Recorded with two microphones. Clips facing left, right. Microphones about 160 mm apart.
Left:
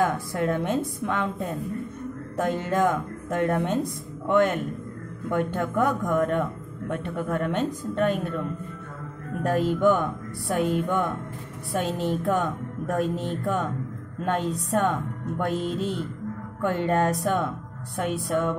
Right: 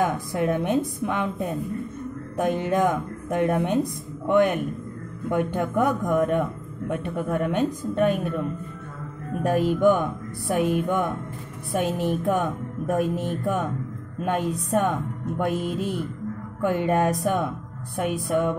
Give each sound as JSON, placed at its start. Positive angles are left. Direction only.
{"t": 0.0, "sound": "a woman's voice", "side_deg": -15}
{"t": 9.4, "sound": "a woman's voice", "side_deg": -15}